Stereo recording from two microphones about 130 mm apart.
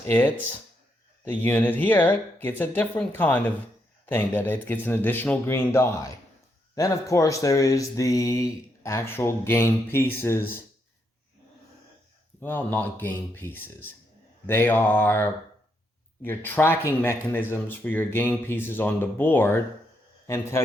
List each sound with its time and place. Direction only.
0.1 s speech: 15° left (ahead or behind)
12.4 s speech: 15° left (ahead or behind)